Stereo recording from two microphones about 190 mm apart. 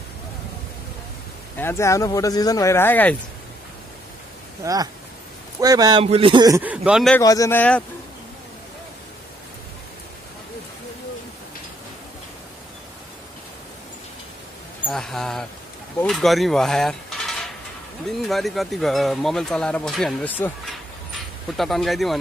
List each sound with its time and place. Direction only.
1.6 s speech: 15° left (ahead or behind)
4.6 s speech: 15° right (ahead or behind)
6.6 s speech: 5° right (ahead or behind)
7.2 s speech: 15° left (ahead or behind)
14.9 s speech: centre (ahead or behind)
16.0 s a sound: centre (ahead or behind)
18.2 s speech: centre (ahead or behind)
21.5 s speech: centre (ahead or behind)